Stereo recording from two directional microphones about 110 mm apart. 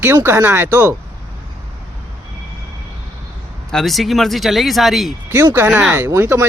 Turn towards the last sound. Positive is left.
turn(degrees=-20)  # may be behind; listen again after turning